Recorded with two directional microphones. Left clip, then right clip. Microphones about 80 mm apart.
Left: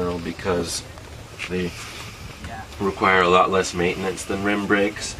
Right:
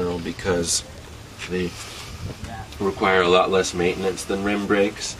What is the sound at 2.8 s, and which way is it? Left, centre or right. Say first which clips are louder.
Speech: left 1 dB; right.